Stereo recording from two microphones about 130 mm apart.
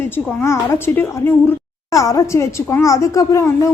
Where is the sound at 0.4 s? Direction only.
20° left (ahead or behind).